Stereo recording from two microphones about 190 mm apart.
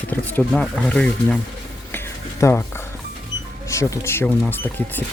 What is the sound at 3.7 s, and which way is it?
Speech, 15° left (ahead or behind).